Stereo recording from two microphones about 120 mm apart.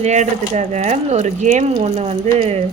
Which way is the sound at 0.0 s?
75° right (ahead or behind).